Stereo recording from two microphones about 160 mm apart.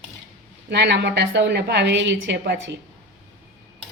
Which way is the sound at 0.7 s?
90° right.